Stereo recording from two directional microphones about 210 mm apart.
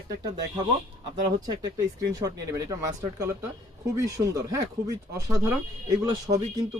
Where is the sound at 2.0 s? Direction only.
15° right (ahead or behind).